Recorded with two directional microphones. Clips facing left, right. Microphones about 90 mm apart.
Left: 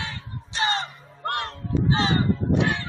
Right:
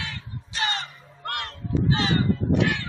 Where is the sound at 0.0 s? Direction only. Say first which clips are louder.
Left 1 dB; 30° left (ahead or behind).